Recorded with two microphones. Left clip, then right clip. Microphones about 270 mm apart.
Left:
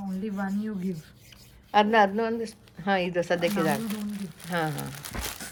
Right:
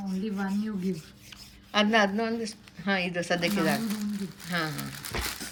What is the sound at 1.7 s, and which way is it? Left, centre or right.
Speech, centre.